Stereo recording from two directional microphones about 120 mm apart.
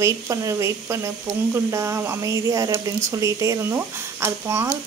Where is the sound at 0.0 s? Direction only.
25° right (ahead or behind).